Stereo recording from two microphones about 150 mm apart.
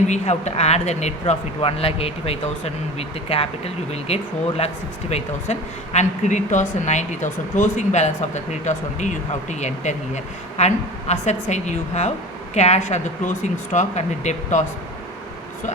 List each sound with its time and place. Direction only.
0.1 s speech: 50° left (ahead or behind)